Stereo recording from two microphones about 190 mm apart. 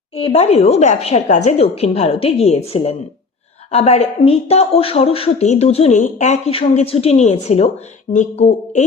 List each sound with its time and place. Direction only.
0.2 s speech: 30° left (ahead or behind)